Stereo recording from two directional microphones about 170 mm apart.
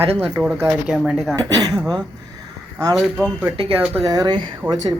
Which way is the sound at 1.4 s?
20° right (ahead or behind).